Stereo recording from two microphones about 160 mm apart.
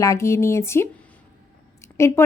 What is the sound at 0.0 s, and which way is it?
Speech, 20° left (ahead or behind).